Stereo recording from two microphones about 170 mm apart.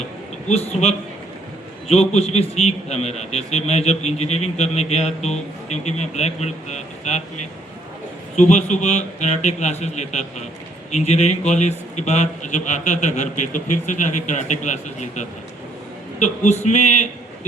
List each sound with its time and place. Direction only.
0.4 s a man's voice: 40° left (ahead or behind)
8.4 s a man's voice: 45° left (ahead or behind)